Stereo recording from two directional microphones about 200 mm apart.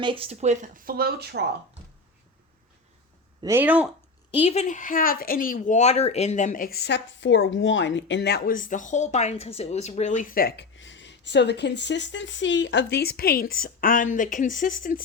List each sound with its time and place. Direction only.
0.0 s speech: 25° right (ahead or behind); by 1.5 s 55° right (ahead or behind)
3.4 s speech: 10° right (ahead or behind)
4.3 s speech: 30° left (ahead or behind); by 10.7 s 50° left (ahead or behind)
10.8 s speech: 65° left (ahead or behind); by 15.0 s 45° left (ahead or behind)